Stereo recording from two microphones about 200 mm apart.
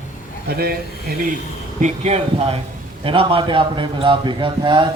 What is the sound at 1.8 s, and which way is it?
A man's voice, 35° right (ahead or behind).